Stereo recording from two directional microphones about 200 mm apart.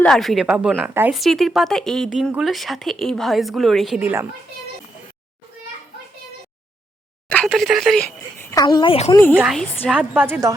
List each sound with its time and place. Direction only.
0.0 s a woman's voice: centre (ahead or behind)
7.3 s speech: 5° left (ahead or behind)
8.4 s a woman's voice: 15° left (ahead or behind)
9.1 s a woman's voice: 10° left (ahead or behind)